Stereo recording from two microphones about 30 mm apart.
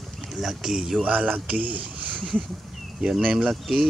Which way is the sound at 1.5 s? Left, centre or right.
Right.